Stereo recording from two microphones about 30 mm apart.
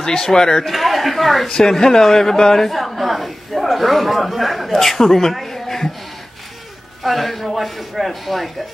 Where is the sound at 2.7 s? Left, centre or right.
Centre.